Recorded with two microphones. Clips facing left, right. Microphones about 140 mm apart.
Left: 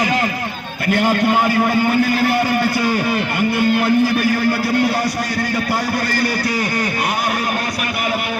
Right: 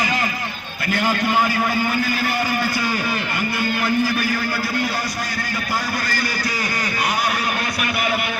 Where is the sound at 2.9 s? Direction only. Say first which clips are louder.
Left 5 dB; 25° left (ahead or behind).